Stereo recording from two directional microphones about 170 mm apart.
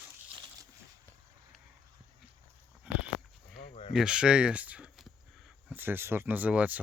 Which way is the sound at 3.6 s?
35° left (ahead or behind).